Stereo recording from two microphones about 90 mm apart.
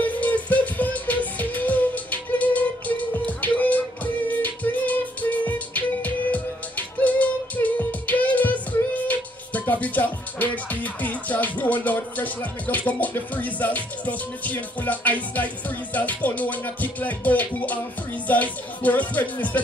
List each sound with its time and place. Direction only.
0.0 s music: 20° left (ahead or behind)